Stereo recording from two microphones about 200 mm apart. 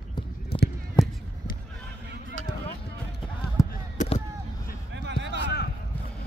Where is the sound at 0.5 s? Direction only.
30° left (ahead or behind).